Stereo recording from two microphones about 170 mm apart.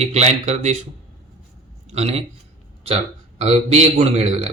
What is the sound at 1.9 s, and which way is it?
Speech, 40° right (ahead or behind).